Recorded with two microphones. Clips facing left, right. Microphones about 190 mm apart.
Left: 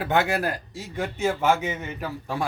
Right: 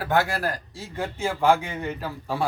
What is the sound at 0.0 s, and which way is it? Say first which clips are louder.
Speech: left 1 dB; 20° left (ahead or behind).